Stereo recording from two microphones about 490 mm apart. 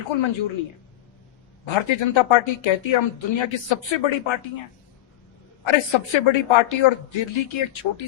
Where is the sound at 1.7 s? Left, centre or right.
Left.